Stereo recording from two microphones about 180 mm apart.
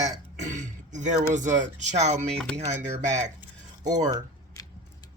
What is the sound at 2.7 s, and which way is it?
Speech, 40° right (ahead or behind).